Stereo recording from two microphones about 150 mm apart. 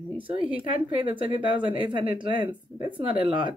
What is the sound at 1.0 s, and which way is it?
Speech, 35° right (ahead or behind).